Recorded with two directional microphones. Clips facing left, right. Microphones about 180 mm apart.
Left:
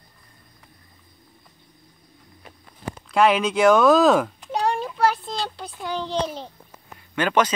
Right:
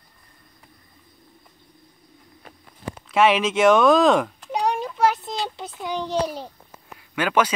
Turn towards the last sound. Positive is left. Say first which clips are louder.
# even
turn(degrees=-10)  # may be behind; listen again after turning